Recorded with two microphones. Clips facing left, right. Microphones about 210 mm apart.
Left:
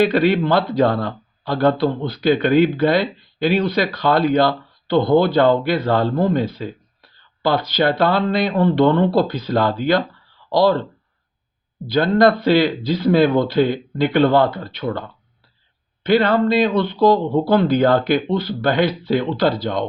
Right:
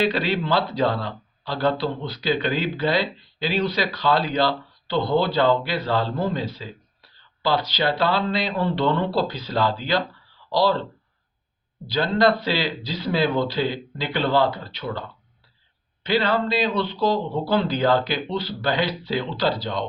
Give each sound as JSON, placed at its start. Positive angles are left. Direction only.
{"t": 0.0, "sound": "speech", "side_deg": 50}
{"t": 11.9, "sound": "speech", "side_deg": 50}
{"t": 16.0, "sound": "speech", "side_deg": 55}